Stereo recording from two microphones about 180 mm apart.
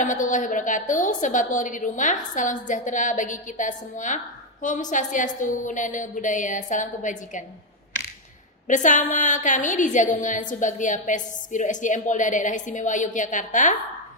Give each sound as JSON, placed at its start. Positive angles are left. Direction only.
{"t": 0.0, "sound": "a woman's voice", "side_deg": 45}
{"t": 8.6, "sound": "a woman's voice", "side_deg": 45}